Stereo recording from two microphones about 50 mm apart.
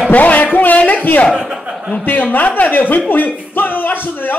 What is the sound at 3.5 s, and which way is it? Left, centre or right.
Music, left.